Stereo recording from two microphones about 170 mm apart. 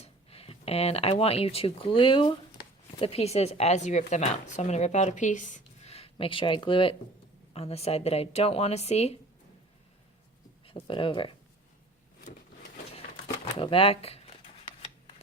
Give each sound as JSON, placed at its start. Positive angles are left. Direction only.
{"t": 0.0, "sound": "speech", "side_deg": 35}
{"t": 10.7, "sound": "speech", "side_deg": 30}
{"t": 13.6, "sound": "speech", "side_deg": 30}